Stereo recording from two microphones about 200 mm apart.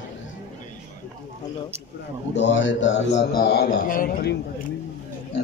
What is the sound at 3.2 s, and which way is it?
A man's voice, 55° left (ahead or behind).